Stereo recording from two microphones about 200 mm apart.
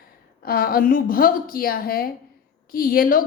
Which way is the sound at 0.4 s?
45° left (ahead or behind).